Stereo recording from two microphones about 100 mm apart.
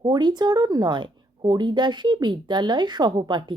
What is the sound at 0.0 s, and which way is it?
Speech, 50° right (ahead or behind).